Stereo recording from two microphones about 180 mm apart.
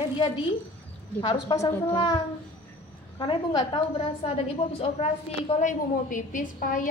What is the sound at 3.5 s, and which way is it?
A woman's voice, 30° left (ahead or behind).